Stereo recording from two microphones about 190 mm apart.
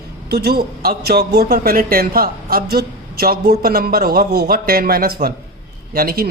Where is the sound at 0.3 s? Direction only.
55° right (ahead or behind).